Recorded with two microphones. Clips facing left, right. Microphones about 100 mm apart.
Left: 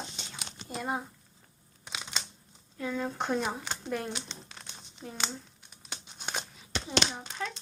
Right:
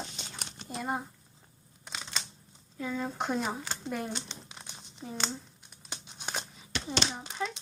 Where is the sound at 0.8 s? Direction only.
Centre (ahead or behind).